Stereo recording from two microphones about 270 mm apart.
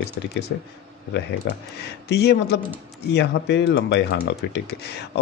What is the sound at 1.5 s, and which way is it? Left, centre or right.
Speech, left.